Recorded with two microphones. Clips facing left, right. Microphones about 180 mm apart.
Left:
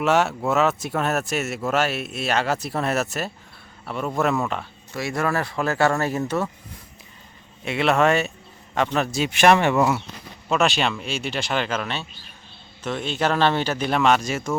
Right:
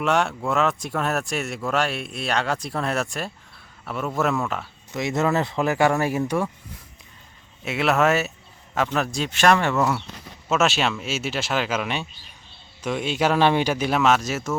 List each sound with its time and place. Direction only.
0.0 s speech: 5° left (ahead or behind)
4.9 s speech: 20° right (ahead or behind)
7.6 s speech: centre (ahead or behind)
9.3 s speech: 15° left (ahead or behind)
10.5 s speech: centre (ahead or behind)